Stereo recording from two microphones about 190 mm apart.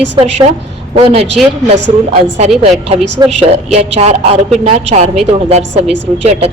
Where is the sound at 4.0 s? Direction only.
35° right (ahead or behind).